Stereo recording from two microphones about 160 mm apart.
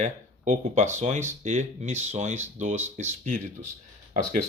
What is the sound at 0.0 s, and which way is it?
Speech, 50° right (ahead or behind).